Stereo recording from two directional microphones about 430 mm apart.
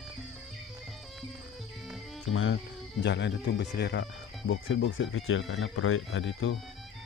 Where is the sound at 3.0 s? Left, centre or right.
Left.